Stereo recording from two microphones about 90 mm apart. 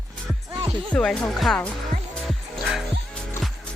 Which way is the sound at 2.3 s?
Centre (ahead or behind).